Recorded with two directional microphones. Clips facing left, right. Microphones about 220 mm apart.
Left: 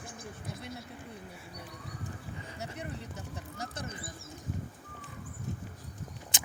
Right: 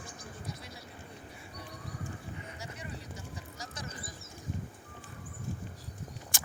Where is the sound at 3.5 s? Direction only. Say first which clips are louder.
Left 7 dB; 60° left (ahead or behind).